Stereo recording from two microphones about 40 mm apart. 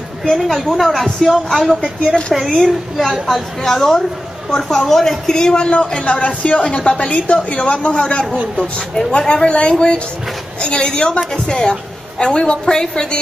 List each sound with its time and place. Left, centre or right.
0.3 s a woman's voice: centre
6.0 s a woman's voice: left